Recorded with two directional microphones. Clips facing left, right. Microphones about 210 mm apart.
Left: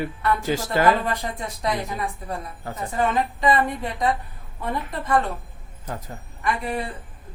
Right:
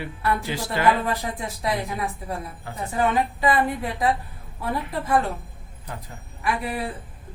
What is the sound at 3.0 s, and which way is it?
A woman's voice, 5° right (ahead or behind).